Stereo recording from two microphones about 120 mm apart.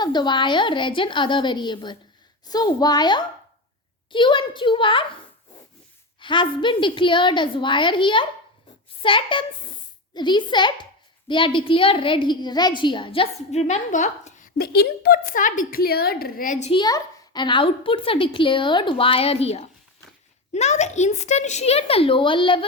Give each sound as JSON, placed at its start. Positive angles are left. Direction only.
{"t": 0.0, "sound": "a woman's voice", "side_deg": 40}
{"t": 6.1, "sound": "a woman's voice", "side_deg": 45}
{"t": 13.5, "sound": "a woman's voice", "side_deg": 70}
{"t": 16.5, "sound": "speech", "side_deg": 75}
{"t": 16.7, "sound": "a woman's voice", "side_deg": 35}
{"t": 20.5, "sound": "speech", "side_deg": 70}